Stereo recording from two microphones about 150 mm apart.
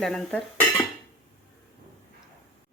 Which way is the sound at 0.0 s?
5° left (ahead or behind).